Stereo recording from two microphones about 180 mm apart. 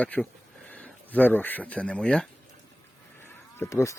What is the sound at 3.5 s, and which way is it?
Speech, 15° left (ahead or behind).